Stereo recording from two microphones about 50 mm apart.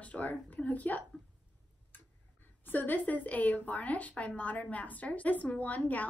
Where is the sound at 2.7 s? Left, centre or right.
Left.